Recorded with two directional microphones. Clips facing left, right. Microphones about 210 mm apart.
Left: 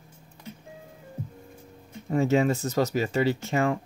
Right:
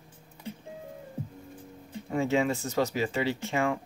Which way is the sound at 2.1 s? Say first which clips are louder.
Left 4 dB; 40° left (ahead or behind).